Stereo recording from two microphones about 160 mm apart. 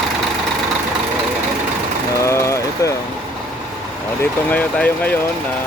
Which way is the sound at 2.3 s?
15° left (ahead or behind).